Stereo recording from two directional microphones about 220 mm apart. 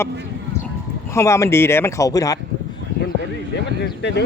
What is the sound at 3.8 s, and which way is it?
Speech, 50° left (ahead or behind).